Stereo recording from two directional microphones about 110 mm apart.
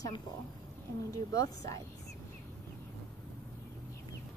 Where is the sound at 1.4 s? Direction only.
30° left (ahead or behind).